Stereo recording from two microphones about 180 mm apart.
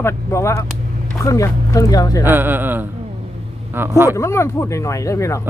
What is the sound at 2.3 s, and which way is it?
Speech, 10° right (ahead or behind).